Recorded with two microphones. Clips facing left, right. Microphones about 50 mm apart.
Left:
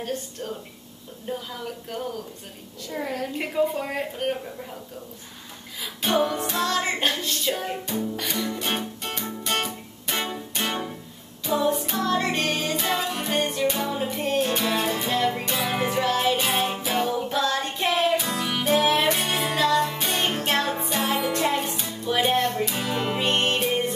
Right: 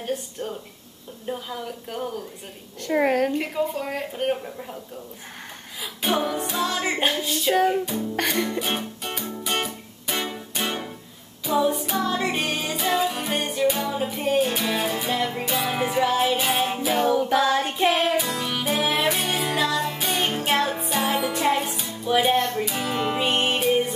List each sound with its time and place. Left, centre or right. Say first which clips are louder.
0.0 s music: right 2 dB; centre
1.3 s a woman's voice: right 1 dB; centre
1.9 s music: right 1 dB; centre
2.8 s a woman's voice: right 9 dB; right
3.3 s a woman's voice: left 1 dB; centre
4.2 s music: right 3 dB; centre
6.0 s music: left 1 dB; centre
8.2 s a woman's voice: right 5 dB; right
8.5 s music: right 1 dB; centre
14.0 s music: right 3 dB; centre
17.1 s music: right 6 dB; right
17.8 s music: right 1 dB; right
18.1 s music: even; centre